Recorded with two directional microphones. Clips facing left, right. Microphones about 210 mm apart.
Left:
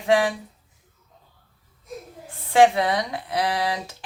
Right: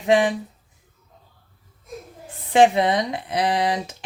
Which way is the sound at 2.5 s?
20° right (ahead or behind).